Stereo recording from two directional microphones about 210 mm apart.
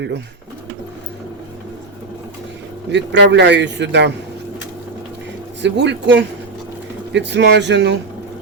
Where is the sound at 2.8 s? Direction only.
55° right (ahead or behind).